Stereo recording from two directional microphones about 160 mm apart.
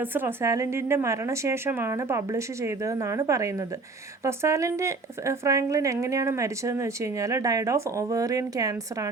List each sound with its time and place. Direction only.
0.0 s a woman's voice: 10° right (ahead or behind)